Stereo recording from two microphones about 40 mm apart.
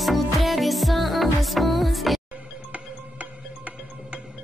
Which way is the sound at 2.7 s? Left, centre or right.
Right.